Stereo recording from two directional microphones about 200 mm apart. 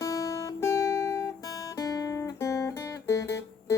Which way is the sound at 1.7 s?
15° left (ahead or behind).